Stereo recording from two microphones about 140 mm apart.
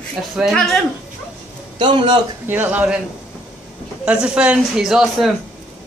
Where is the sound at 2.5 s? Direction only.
15° right (ahead or behind).